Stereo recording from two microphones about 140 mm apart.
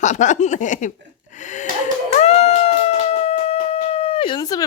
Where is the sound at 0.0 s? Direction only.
60° left (ahead or behind).